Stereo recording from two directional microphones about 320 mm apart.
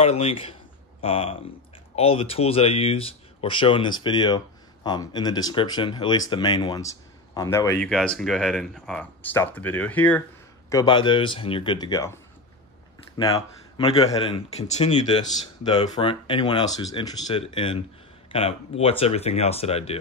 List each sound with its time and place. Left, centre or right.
0.0 s speech: centre
13.2 s speech: centre